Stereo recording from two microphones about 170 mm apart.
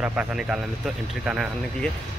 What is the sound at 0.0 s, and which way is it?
Speech, 10° right (ahead or behind).